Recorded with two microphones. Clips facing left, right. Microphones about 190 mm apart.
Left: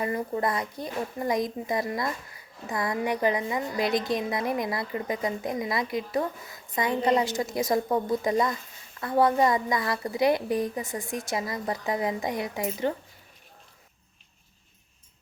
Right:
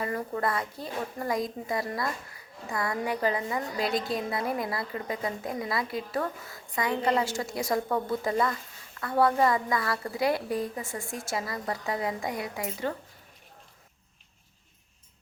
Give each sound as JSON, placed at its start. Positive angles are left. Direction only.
{"t": 0.0, "sound": "a woman's voice", "side_deg": 15}